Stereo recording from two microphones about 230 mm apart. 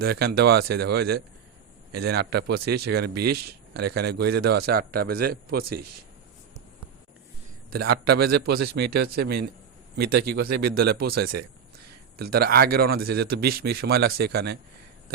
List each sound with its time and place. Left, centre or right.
0.0 s a man's voice: right
8.1 s a man's voice: right